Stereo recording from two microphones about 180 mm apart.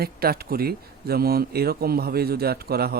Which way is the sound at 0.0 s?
55° right (ahead or behind).